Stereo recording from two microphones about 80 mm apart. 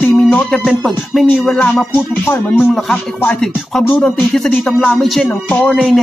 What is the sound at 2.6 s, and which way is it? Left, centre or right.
Music, centre.